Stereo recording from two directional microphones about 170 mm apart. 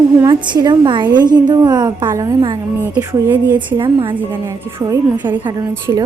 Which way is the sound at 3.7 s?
30° right (ahead or behind).